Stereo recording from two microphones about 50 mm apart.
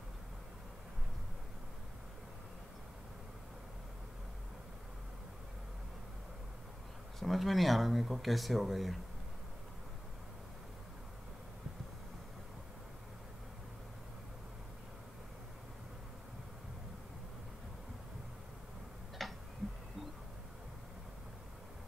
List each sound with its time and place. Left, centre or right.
7.2 s speech: centre
19.2 s tick-tock: centre